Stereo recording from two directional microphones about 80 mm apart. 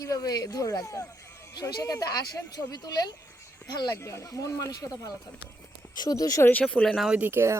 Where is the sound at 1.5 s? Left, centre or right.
Left.